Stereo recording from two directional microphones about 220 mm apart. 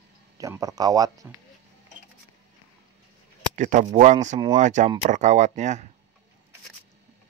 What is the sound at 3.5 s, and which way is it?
Speech, 35° right (ahead or behind).